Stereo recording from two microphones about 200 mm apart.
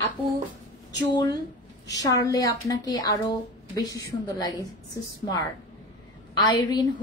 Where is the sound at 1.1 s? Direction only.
20° left (ahead or behind).